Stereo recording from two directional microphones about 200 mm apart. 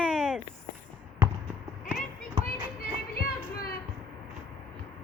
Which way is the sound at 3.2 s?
50° left (ahead or behind).